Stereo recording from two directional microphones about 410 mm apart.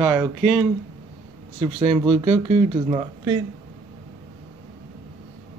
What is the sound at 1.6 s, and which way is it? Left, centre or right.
Speech, centre.